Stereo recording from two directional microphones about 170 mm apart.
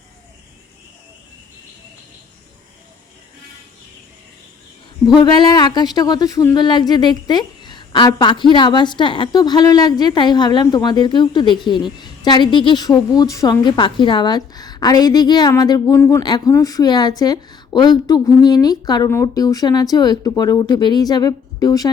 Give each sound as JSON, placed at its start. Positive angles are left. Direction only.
{"t": 5.2, "sound": "a woman's voice", "side_deg": 25}